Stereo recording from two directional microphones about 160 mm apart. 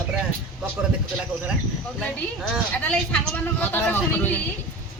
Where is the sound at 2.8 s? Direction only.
10° left (ahead or behind).